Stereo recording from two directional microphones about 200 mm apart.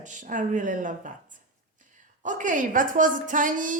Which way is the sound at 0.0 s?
40° right (ahead or behind).